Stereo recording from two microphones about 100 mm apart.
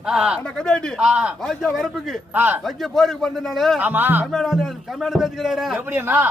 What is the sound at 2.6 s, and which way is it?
Speech, centre (ahead or behind).